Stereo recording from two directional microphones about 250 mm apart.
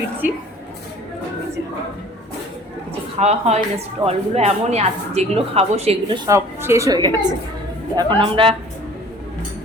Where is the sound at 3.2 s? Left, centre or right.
Right.